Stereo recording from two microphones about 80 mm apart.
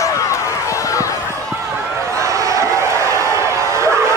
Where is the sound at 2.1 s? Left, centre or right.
Right.